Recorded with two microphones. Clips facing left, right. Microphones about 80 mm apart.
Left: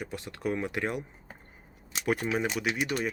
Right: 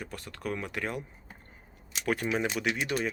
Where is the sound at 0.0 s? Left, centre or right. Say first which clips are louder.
Left 4 dB; centre.